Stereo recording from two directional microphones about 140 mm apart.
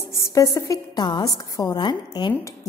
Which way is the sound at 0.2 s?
20° left (ahead or behind).